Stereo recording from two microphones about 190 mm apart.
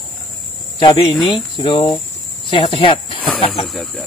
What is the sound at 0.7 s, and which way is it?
Speech, 25° left (ahead or behind).